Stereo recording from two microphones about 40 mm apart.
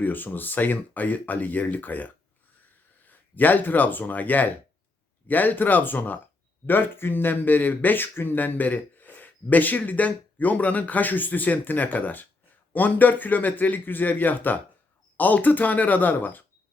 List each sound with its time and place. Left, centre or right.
0.0 s speech: left